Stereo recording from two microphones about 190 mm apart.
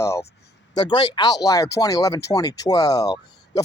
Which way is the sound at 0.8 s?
25° left (ahead or behind).